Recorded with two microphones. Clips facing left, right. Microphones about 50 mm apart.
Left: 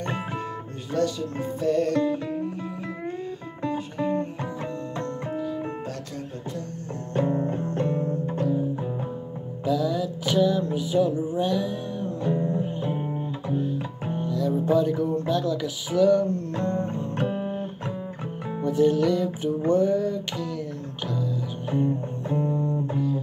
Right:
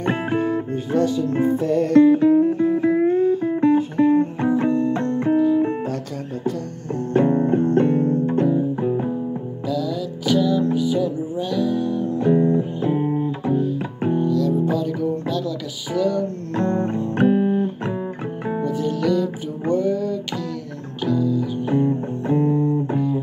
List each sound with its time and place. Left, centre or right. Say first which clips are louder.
0.0 s music: right 9 dB; right
7.2 s music: right 8 dB; right
9.7 s music: even; centre
12.2 s music: right 9 dB; right
12.8 s music: right 8 dB; centre
14.2 s music: right 3 dB; centre
16.5 s music: right 11 dB; right
17.3 s music: right 11 dB; centre
18.6 s music: left 3 dB; centre
19.7 s a sound: right 2 dB; centre
21.1 s music: right 10 dB; centre
21.6 s music: right 4 dB; right